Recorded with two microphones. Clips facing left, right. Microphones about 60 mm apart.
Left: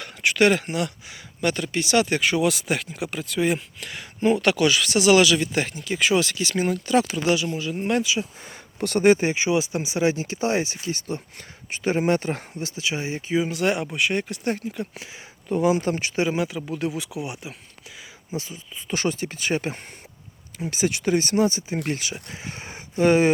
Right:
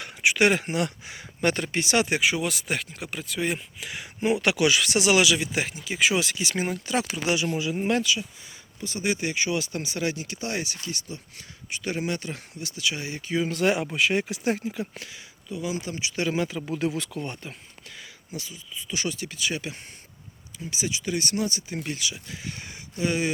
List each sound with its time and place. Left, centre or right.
0.0 s speech: centre
2.2 s speech: centre
7.3 s speech: right
7.6 s speech: centre
8.2 s speech: left
9.0 s speech: left
11.0 s speech: left; by 13.5 s centre
13.5 s speech: centre
14.9 s speech: left
15.4 s speech: left
16.3 s speech: centre
18.3 s speech: left